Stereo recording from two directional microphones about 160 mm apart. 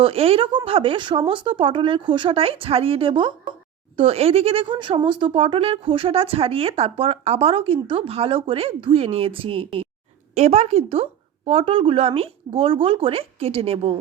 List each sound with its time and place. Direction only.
0.0 s speech: 35° right (ahead or behind)